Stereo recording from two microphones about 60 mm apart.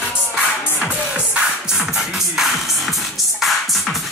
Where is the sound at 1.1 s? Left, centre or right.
Centre.